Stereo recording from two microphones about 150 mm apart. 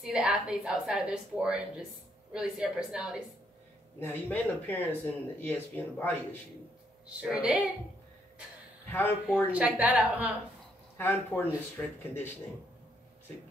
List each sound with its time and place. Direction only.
0.0 s a woman's voice: 5° right (ahead or behind)
4.0 s speech: 15° left (ahead or behind)
7.2 s a woman's voice: 10° right (ahead or behind)
8.8 s speech: 15° left (ahead or behind)
9.5 s a woman's voice: 10° right (ahead or behind)
11.0 s speech: 15° left (ahead or behind)